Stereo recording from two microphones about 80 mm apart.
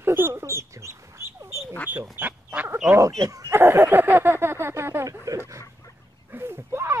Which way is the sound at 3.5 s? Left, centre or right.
Right.